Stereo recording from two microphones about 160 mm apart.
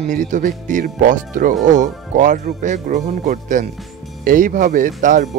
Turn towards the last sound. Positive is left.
turn(degrees=-55)  # may be behind; listen again after turning